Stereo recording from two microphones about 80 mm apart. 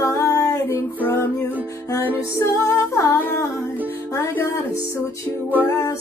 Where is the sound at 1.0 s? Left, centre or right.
Left.